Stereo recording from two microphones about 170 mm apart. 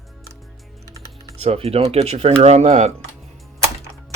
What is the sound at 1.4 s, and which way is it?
Speech, 35° right (ahead or behind).